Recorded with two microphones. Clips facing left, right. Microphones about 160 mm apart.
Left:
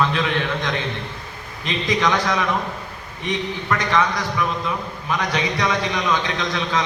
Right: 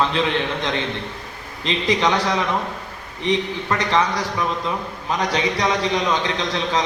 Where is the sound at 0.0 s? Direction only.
25° right (ahead or behind).